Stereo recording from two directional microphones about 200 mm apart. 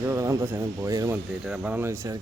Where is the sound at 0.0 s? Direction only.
15° right (ahead or behind).